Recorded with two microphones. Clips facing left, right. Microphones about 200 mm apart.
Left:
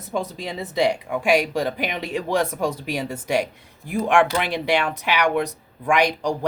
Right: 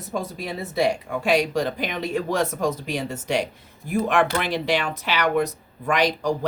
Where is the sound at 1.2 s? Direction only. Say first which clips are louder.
Left 1 dB; 15° left (ahead or behind).